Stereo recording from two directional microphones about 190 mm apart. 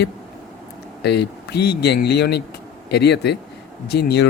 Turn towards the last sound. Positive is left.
turn(degrees=60)  # may be behind; listen again after turning